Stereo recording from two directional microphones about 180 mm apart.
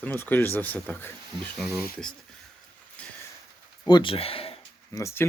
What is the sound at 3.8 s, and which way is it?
Speech, 25° left (ahead or behind).